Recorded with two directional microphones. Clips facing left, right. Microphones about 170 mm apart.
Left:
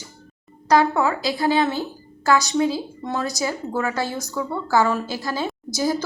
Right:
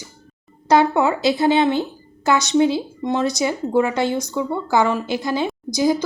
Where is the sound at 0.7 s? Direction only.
25° right (ahead or behind).